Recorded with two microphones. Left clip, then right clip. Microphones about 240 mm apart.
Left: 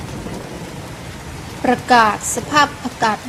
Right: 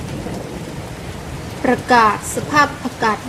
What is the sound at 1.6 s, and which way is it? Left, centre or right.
A woman's voice, left.